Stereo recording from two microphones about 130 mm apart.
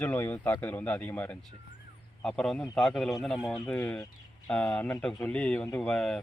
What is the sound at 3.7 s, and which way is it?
Speech, 20° left (ahead or behind).